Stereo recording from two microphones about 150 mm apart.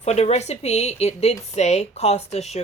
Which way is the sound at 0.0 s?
45° left (ahead or behind).